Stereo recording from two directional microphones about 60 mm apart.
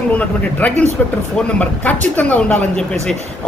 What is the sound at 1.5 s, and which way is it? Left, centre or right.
A man's voice, left.